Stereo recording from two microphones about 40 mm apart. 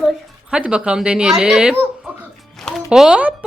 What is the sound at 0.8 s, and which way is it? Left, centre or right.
Speech, right.